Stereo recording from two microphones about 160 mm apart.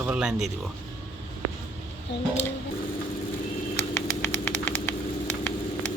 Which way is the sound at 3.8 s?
15° left (ahead or behind).